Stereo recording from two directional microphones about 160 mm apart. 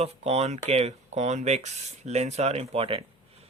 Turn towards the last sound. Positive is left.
turn(degrees=-35)  # may be behind; listen again after turning